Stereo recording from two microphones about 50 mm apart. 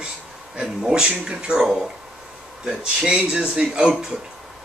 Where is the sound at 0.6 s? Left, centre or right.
Centre.